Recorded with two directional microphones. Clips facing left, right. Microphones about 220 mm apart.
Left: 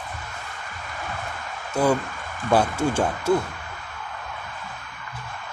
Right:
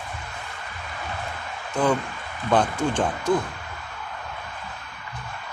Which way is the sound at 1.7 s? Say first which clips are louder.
Left 1 dB; 10° left (ahead or behind).